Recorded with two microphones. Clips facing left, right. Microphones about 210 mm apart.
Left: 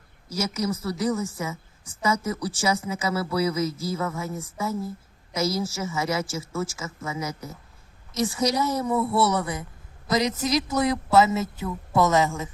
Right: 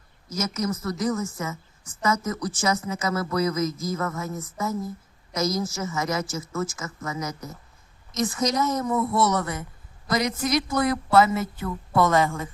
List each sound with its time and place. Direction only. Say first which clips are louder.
0.3 s a woman's voice: even; 10° left (ahead or behind)